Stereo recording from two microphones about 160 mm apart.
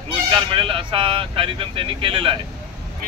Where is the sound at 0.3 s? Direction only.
30° right (ahead or behind).